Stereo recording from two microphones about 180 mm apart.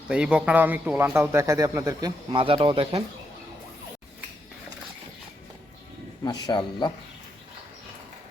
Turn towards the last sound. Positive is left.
turn(degrees=25)  # may be behind; listen again after turning